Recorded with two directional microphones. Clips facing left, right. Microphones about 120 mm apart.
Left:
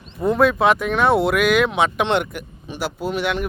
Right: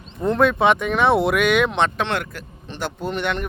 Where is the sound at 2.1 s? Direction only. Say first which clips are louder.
Left 5 dB; 20° left (ahead or behind).